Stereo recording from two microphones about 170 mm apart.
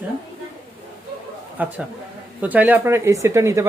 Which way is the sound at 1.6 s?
10° right (ahead or behind).